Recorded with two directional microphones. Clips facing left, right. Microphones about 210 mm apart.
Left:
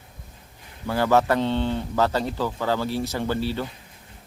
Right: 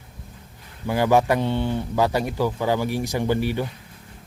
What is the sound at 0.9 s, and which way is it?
Speech, 15° right (ahead or behind).